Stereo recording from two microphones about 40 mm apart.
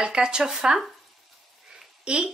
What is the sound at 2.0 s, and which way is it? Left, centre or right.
Speech, right.